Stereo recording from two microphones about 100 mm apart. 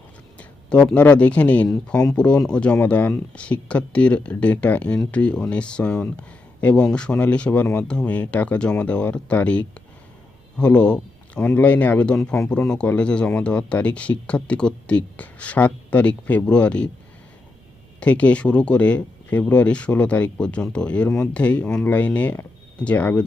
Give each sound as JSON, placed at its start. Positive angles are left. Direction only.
{"t": 0.3, "sound": "a sound", "side_deg": 15}
{"t": 0.9, "sound": "speech", "side_deg": 15}
{"t": 18.0, "sound": "speech", "side_deg": 15}